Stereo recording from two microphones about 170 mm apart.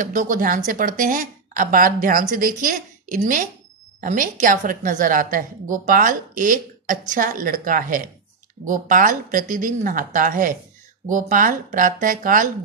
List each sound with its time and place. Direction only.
0.0 s a woman's voice: 50° right (ahead or behind)